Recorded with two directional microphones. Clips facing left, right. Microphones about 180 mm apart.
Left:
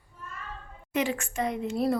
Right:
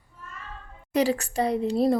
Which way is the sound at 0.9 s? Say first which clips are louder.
Right 5 dB; 35° right (ahead or behind).